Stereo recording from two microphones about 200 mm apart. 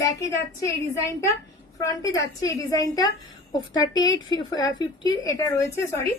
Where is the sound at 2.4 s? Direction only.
15° left (ahead or behind).